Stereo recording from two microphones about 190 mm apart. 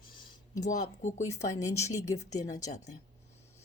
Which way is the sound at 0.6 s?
40° left (ahead or behind).